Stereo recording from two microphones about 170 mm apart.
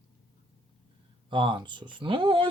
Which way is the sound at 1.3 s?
25° right (ahead or behind).